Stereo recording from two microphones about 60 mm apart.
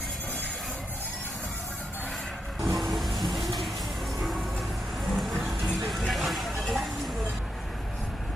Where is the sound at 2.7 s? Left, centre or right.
Centre.